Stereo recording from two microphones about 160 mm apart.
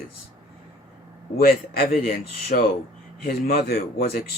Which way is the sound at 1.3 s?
70° left (ahead or behind).